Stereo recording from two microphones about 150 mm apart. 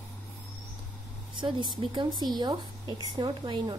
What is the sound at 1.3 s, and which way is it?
A woman's voice, 35° right (ahead or behind).